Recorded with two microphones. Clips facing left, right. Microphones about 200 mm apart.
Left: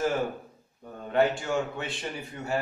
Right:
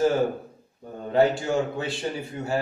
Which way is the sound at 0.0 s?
30° right (ahead or behind).